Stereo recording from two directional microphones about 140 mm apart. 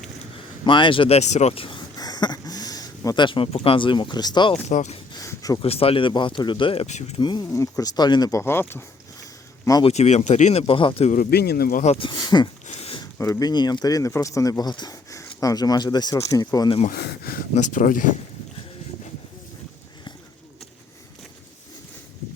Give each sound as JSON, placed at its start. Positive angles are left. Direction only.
{"t": 0.6, "sound": "speech", "side_deg": 35}
{"t": 4.7, "sound": "speech", "side_deg": 55}
{"t": 5.1, "sound": "a sound", "side_deg": 25}
{"t": 5.6, "sound": "speech", "side_deg": 45}
{"t": 6.8, "sound": "speech", "side_deg": 55}
{"t": 7.2, "sound": "speech", "side_deg": 30}
{"t": 9.8, "sound": "speech", "side_deg": 55}
{"t": 11.1, "sound": "speech", "side_deg": 85}
{"t": 11.9, "sound": "speech", "side_deg": 35}
{"t": 12.6, "sound": "a sound", "side_deg": 45}
{"t": 13.1, "sound": "speech", "side_deg": 20}
{"t": 16.9, "sound": "a sound", "side_deg": 90}
{"t": 17.5, "sound": "speech", "side_deg": 65}